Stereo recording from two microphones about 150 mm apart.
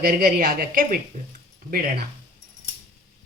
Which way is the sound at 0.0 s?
80° right.